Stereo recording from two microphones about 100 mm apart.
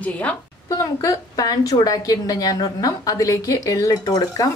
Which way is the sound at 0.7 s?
35° left (ahead or behind).